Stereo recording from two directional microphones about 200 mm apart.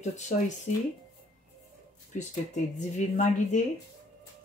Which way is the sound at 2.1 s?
35° left (ahead or behind).